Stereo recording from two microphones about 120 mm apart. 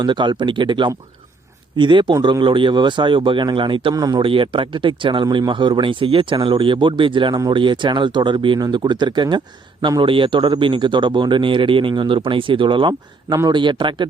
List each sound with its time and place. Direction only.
0.0 s speech: 40° right (ahead or behind)
3.9 s speech: 30° right (ahead or behind)
4.2 s speech: 45° right (ahead or behind)